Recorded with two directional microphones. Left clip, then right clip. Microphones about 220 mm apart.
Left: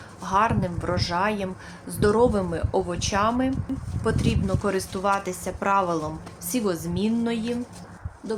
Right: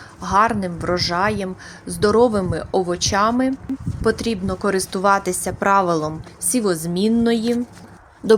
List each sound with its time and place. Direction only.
0.2 s a woman's voice: 20° right (ahead or behind)